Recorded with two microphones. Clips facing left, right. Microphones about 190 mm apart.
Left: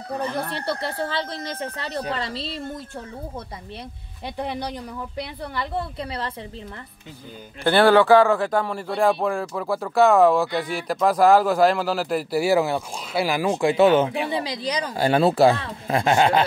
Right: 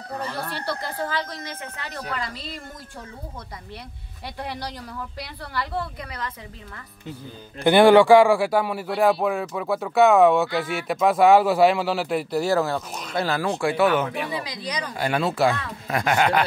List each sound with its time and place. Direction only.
0.2 s speech: 20° left (ahead or behind)
4.4 s speech: 20° left (ahead or behind)
7.6 s speech: 15° right (ahead or behind); by 16.4 s 25° left (ahead or behind)